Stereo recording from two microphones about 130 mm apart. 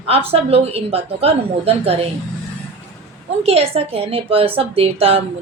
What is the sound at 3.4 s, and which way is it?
A woman's voice, 50° right (ahead or behind).